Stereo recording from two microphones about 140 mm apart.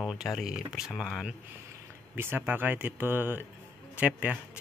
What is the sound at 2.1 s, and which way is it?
Speech, 15° right (ahead or behind).